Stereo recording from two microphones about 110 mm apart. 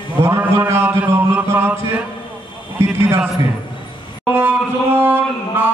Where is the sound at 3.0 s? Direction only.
25° right (ahead or behind).